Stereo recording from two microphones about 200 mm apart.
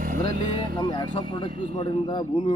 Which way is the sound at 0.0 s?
45° right (ahead or behind).